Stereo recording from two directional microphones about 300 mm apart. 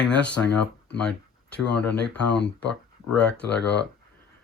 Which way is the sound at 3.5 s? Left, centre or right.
Left.